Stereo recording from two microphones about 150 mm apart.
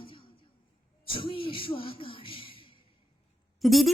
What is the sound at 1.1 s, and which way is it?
Speech, 35° left (ahead or behind).